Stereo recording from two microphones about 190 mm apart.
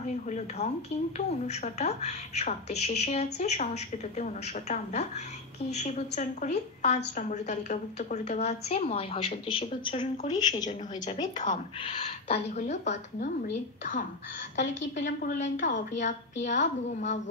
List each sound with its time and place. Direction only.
0.0 s a woman's voice: 40° left (ahead or behind)
10.5 s a woman's voice: 40° left (ahead or behind)
15.0 s a woman's voice: 40° left (ahead or behind)